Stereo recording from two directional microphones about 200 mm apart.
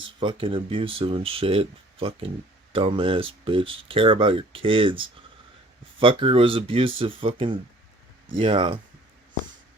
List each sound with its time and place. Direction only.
0.2 s speech: 25° right (ahead or behind)